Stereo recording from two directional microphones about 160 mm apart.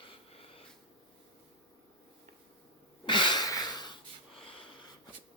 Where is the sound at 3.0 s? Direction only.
30° left (ahead or behind).